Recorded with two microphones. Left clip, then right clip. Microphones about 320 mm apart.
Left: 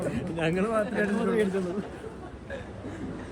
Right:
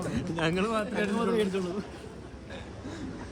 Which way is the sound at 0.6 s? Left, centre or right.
Centre.